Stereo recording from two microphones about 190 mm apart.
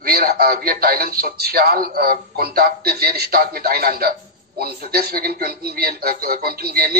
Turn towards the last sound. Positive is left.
turn(degrees=-55)  # may be behind; listen again after turning